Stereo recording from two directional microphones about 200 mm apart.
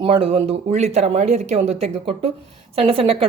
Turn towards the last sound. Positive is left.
turn(degrees=-30)  # may be behind; listen again after turning